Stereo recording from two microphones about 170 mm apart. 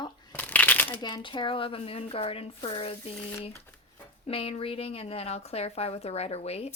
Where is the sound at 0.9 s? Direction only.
25° left (ahead or behind).